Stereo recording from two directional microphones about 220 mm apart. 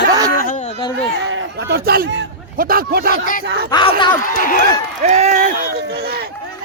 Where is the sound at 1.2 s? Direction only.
55° right (ahead or behind).